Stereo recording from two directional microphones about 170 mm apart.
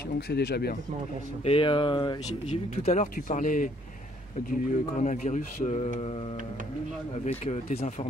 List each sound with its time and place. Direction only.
0.3 s speech: 75° left (ahead or behind)
1.4 s speech: 30° left (ahead or behind)
2.2 s speech: 40° left (ahead or behind)
7.2 s speech: 35° left (ahead or behind)